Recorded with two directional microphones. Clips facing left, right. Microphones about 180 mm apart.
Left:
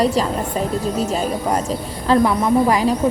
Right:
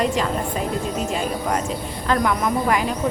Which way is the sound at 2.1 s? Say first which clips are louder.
Left 5 dB; 30° left (ahead or behind).